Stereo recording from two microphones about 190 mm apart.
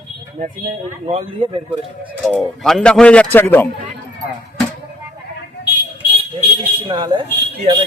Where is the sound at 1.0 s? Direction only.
30° right (ahead or behind).